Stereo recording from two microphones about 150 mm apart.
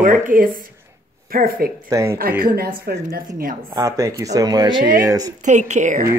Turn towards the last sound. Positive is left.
turn(degrees=-55)  # may be behind; listen again after turning